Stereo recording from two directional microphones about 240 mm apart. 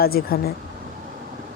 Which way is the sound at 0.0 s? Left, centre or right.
Left.